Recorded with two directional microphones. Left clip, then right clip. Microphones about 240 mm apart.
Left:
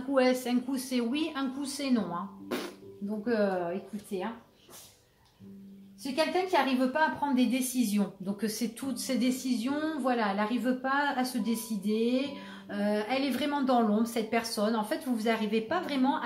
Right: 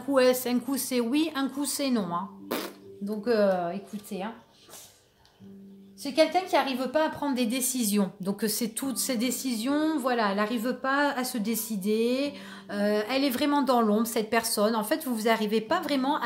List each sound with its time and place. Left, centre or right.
0.1 s a woman's voice: right
6.1 s a woman's voice: right